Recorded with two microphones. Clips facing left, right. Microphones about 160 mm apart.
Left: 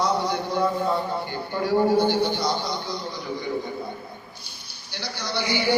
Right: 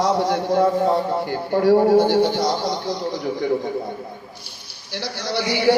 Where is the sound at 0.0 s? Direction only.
90° right.